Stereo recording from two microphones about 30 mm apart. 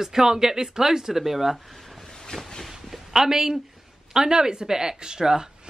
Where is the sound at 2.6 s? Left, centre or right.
Centre.